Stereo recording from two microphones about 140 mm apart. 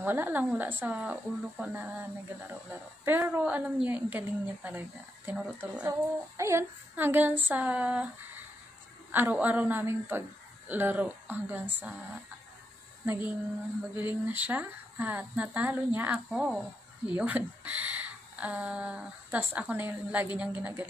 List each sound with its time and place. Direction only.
0.0 s speech: 15° right (ahead or behind)
5.9 s speech: 20° right (ahead or behind)
9.1 s speech: 15° right (ahead or behind)
13.0 s a sound: 15° right (ahead or behind)
13.9 s speech: 15° right (ahead or behind)